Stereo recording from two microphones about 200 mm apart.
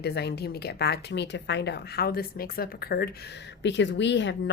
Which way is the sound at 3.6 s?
60° left (ahead or behind).